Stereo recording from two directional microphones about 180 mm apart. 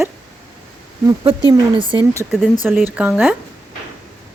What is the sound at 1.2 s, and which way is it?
Speech, 25° right (ahead or behind).